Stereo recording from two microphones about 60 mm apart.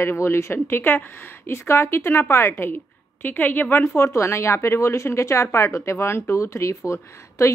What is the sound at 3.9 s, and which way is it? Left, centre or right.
Speech, left.